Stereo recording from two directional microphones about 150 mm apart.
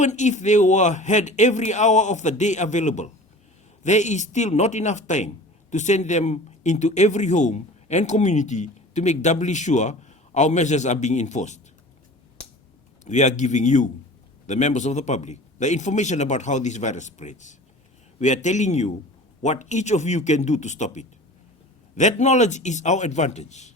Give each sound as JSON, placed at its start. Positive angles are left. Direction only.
{"t": 0.0, "sound": "speech", "side_deg": 50}
{"t": 13.1, "sound": "speech", "side_deg": 50}